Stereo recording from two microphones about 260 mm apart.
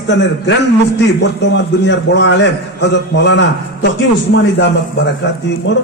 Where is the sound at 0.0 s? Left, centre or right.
Left.